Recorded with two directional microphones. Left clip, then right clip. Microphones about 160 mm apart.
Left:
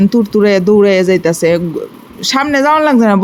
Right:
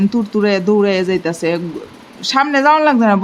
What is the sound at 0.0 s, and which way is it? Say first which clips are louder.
Speech: left 6 dB; 30° left (ahead or behind).